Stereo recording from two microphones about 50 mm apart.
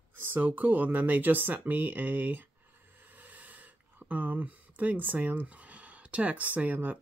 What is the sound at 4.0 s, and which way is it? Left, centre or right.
Speech, right.